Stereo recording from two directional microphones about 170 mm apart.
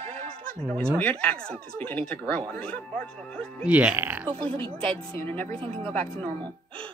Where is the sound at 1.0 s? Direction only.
5° left (ahead or behind).